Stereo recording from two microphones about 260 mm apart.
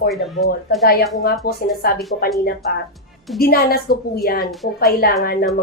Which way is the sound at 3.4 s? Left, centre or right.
Left.